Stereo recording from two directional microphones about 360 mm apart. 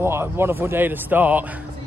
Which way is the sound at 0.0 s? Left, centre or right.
Centre.